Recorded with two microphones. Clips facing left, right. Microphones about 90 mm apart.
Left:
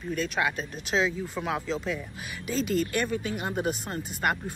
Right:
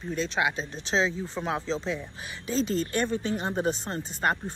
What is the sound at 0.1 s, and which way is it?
Speech, 20° right (ahead or behind).